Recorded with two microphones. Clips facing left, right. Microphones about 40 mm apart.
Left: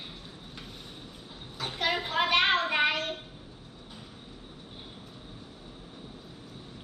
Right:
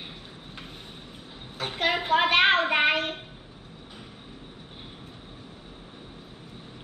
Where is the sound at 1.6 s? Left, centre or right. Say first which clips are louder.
Right 3 dB; right.